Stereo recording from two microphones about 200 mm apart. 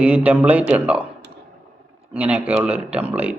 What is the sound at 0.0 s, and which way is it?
A man's voice, 5° right (ahead or behind).